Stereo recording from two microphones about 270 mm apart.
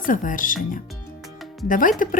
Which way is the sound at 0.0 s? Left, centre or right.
Left.